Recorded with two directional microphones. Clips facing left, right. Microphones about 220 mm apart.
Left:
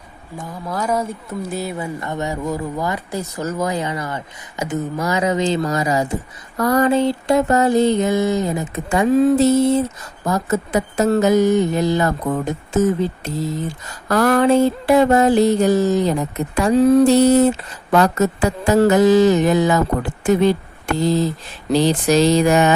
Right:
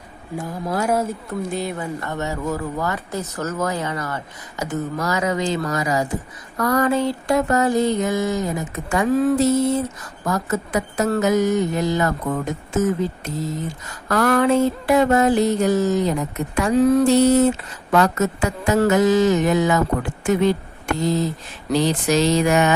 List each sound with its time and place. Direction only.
0.3 s speech: 10° right (ahead or behind)
1.3 s speech: 5° left (ahead or behind)
2.0 s speech: 15° left (ahead or behind)
6.6 s a sound: 30° left (ahead or behind)
14.1 s music: 30° left (ahead or behind)